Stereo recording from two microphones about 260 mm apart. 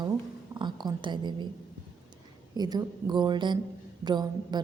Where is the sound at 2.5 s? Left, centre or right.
Centre.